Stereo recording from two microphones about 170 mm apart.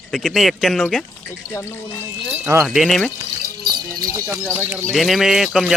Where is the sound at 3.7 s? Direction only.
20° right (ahead or behind).